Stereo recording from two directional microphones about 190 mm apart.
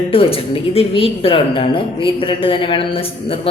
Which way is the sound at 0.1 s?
30° left (ahead or behind).